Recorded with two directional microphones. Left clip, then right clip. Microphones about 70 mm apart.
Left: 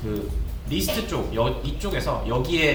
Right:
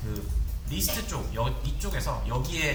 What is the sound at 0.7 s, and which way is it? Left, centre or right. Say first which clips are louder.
Speech: left 7 dB; right.